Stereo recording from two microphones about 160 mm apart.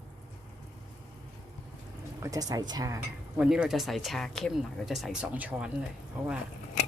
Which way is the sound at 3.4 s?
5° right (ahead or behind).